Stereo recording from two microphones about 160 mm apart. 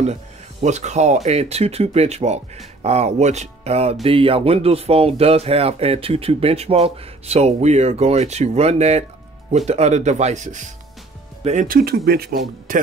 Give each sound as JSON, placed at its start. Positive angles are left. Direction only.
{"t": 0.0, "sound": "speech", "side_deg": -45}